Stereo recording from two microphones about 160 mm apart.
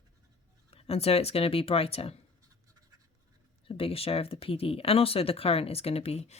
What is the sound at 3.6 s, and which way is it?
Speech, 35° left (ahead or behind).